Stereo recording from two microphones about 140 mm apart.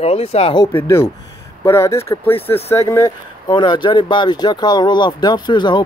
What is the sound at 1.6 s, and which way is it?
Speech, 20° left (ahead or behind).